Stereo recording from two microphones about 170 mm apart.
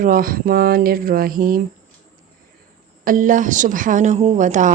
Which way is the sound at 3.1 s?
50° right (ahead or behind).